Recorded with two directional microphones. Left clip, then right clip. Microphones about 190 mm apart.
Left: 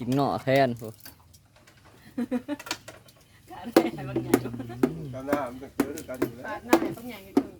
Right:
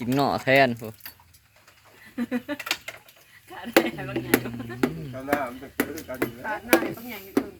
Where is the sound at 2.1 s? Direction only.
60° left (ahead or behind).